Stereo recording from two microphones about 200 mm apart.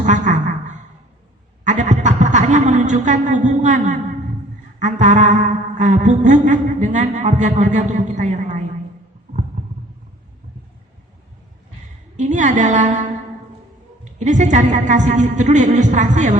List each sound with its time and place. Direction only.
0.0 s a sound: 40° right (ahead or behind)
1.6 s chuckle: 40° right (ahead or behind)
4.8 s a woman's voice: 40° right (ahead or behind)
12.1 s a woman's voice: 35° right (ahead or behind)